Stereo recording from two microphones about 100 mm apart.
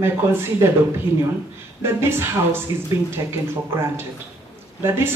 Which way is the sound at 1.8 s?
25° right (ahead or behind).